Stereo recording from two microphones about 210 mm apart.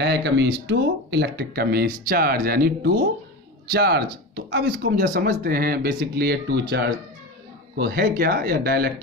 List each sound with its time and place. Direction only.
0.0 s speech: 55° right (ahead or behind)
4.5 s speech: 65° right (ahead or behind)
4.9 s speech: 40° right (ahead or behind)
7.7 s speech: 50° right (ahead or behind)